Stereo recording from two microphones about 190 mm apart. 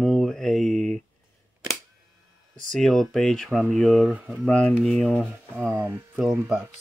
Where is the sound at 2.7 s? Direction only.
Centre (ahead or behind).